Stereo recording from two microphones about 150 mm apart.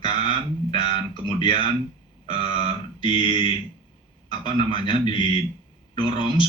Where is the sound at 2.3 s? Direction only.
35° left (ahead or behind).